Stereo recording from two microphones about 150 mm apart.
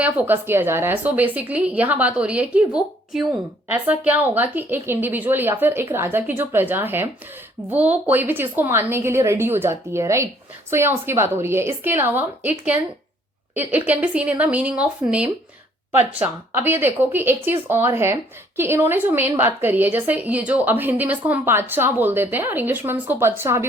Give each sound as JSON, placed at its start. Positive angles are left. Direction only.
{"t": 0.0, "sound": "speech", "side_deg": -10}
{"t": 13.5, "sound": "speech", "side_deg": -10}